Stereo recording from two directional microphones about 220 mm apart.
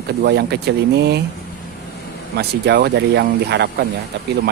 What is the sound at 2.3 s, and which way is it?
Speech, 50° right (ahead or behind).